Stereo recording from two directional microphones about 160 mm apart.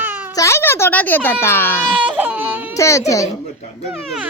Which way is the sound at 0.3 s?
15° left (ahead or behind).